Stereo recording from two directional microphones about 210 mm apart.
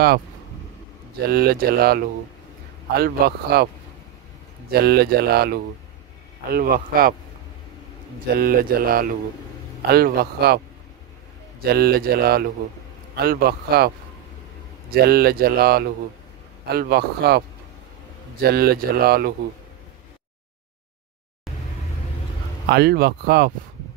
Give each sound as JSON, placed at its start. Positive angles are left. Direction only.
{"t": 1.3, "sound": "speech", "side_deg": -45}
{"t": 4.6, "sound": "speech", "side_deg": -50}
{"t": 8.4, "sound": "speech", "side_deg": -45}
{"t": 11.6, "sound": "speech", "side_deg": -50}
{"t": 18.4, "sound": "speech", "side_deg": -45}
{"t": 22.7, "sound": "speech", "side_deg": -50}